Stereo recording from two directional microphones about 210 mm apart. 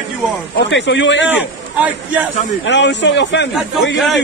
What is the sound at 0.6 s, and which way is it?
Speech, 60° left (ahead or behind).